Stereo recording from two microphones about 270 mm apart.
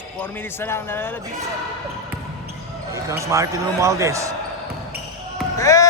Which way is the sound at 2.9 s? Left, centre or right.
Centre.